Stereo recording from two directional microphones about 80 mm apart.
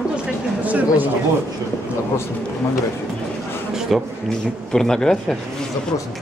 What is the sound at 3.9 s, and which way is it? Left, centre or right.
Speech, centre.